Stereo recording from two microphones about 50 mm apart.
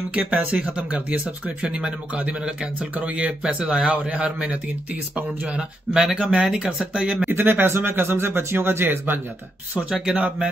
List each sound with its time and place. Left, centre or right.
0.1 s speech: right
7.2 s speech: right
9.8 s speech: right